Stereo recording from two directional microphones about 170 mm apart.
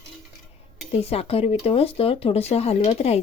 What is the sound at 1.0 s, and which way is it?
Speech, 35° left (ahead or behind).